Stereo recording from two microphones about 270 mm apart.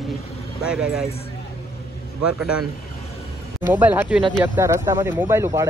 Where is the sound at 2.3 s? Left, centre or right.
Centre.